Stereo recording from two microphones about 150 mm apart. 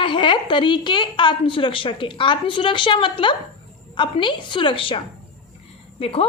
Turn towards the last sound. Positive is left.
turn(degrees=40)  # may be behind; listen again after turning